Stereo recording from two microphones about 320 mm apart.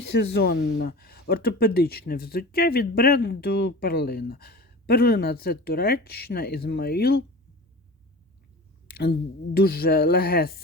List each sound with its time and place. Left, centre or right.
0.0 s speech: left
8.9 s a sound: left
9.6 s speech: left